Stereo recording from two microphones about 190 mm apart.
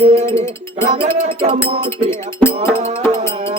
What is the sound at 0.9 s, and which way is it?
Music, 30° right (ahead or behind).